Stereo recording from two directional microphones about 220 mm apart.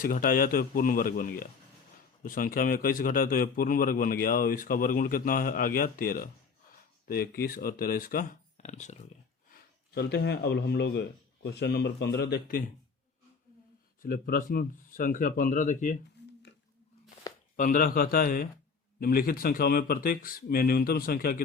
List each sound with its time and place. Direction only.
0.0 s a man's voice: 40° left (ahead or behind)
9.9 s speech: 50° left (ahead or behind)
14.0 s a man's voice: 40° left (ahead or behind)
16.2 s a sound: 50° left (ahead or behind)
17.6 s a man's voice: 40° left (ahead or behind)